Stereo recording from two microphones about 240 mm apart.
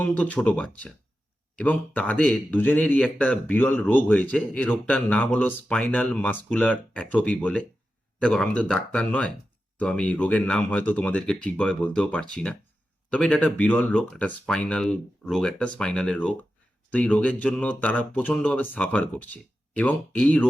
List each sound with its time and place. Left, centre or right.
0.0 s speech: centre